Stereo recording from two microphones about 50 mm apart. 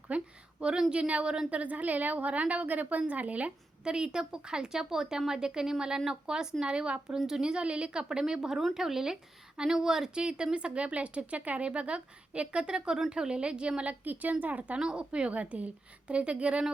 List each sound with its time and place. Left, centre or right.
0.1 s a sound: right
0.6 s a woman's voice: centre
3.8 s a woman's voice: centre
7.2 s a woman's voice: centre
14.0 s a woman's voice: right
14.8 s speech: centre